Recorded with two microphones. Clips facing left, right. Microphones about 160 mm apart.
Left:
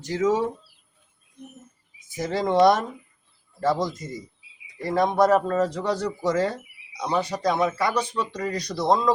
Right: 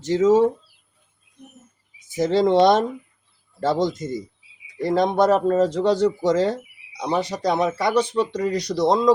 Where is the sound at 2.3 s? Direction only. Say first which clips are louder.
Right 3 dB; 25° right (ahead or behind).